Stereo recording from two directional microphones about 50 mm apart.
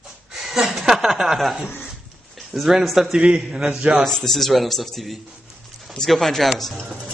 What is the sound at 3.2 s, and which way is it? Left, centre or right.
Speech, centre.